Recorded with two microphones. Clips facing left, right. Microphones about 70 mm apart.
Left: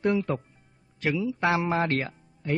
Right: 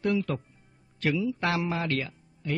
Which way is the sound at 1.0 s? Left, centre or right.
Centre.